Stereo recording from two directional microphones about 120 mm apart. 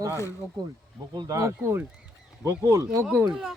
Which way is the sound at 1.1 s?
30° right (ahead or behind).